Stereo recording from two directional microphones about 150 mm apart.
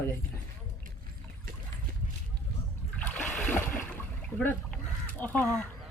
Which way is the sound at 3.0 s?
10° left (ahead or behind).